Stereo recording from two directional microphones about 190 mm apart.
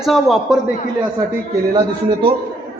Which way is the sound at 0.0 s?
Centre (ahead or behind).